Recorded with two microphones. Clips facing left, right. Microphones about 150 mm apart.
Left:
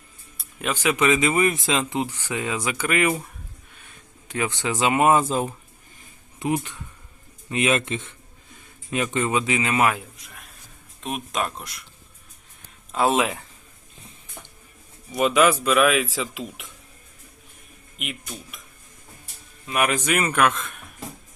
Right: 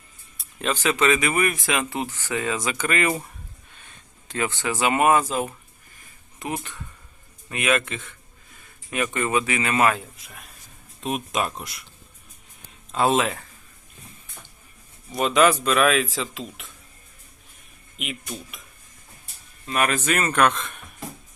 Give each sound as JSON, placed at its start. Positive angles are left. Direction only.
{"t": 0.6, "sound": "speech", "side_deg": 10}
{"t": 4.3, "sound": "speech", "side_deg": 15}
{"t": 6.4, "sound": "speech", "side_deg": 15}
{"t": 10.2, "sound": "speech", "side_deg": 0}
{"t": 12.9, "sound": "speech", "side_deg": 10}
{"t": 15.1, "sound": "speech", "side_deg": 10}
{"t": 17.9, "sound": "speech", "side_deg": 0}
{"t": 19.6, "sound": "speech", "side_deg": 15}